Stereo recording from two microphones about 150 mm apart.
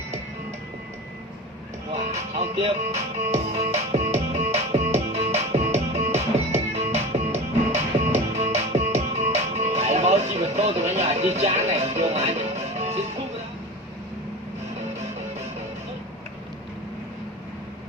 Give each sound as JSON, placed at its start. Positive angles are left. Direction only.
{"t": 2.3, "sound": "music", "side_deg": -45}